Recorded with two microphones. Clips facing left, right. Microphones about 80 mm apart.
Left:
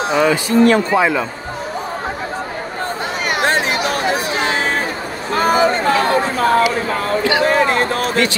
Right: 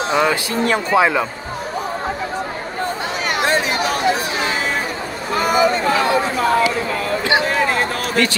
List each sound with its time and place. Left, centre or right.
0.0 s speech: centre
3.4 s chatter: left
4.4 s a sound: left